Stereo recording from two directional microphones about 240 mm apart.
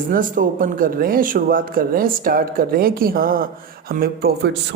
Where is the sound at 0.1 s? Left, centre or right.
Right.